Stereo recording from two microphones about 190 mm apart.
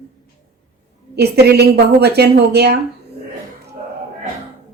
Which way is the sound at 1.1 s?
60° right (ahead or behind).